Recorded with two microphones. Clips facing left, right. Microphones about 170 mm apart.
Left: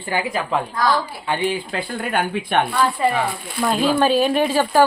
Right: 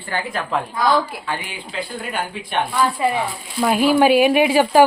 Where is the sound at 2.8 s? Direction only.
10° right (ahead or behind).